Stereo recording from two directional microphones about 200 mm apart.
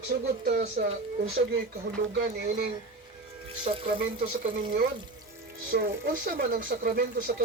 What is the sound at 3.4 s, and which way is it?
Speech, 25° right (ahead or behind).